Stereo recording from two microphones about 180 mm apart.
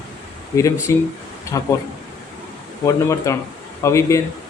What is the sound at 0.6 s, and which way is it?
A man's voice, 15° left (ahead or behind).